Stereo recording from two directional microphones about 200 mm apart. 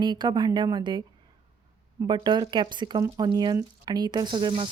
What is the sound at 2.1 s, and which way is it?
A woman's voice, 20° right (ahead or behind).